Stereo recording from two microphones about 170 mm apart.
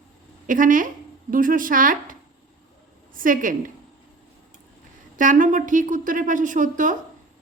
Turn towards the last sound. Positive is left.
turn(degrees=-50)  # may be behind; listen again after turning